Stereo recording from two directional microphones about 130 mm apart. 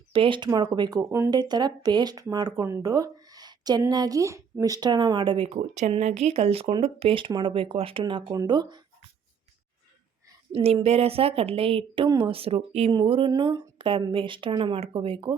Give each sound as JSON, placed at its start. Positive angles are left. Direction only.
{"t": 0.1, "sound": "speech", "side_deg": -40}
{"t": 5.5, "sound": "speech", "side_deg": -70}
{"t": 6.0, "sound": "speech", "side_deg": -55}
{"t": 10.5, "sound": "speech", "side_deg": -50}
{"t": 12.9, "sound": "speech", "side_deg": -40}